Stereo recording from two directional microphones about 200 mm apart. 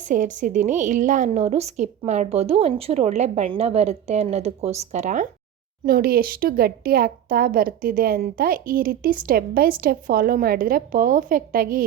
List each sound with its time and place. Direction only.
0.0 s a woman's voice: 40° right (ahead or behind)
5.8 s speech: 45° right (ahead or behind)